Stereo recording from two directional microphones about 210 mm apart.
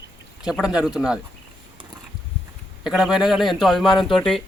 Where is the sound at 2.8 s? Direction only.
Centre (ahead or behind).